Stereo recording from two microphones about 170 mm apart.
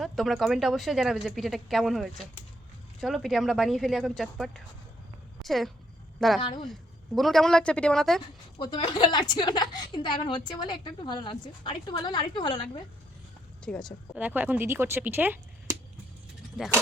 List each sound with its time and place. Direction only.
0.0 s a woman's voice: centre (ahead or behind)
6.4 s a woman's voice: 30° left (ahead or behind)
7.2 s speech: centre (ahead or behind)
8.5 s a woman's voice: 30° left (ahead or behind)
13.6 s speech: 5° left (ahead or behind)
14.2 s speech: 10° right (ahead or behind)